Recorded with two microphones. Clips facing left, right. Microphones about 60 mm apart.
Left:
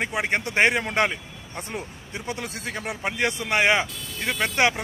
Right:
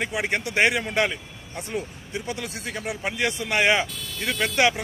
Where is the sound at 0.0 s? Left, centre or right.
Left.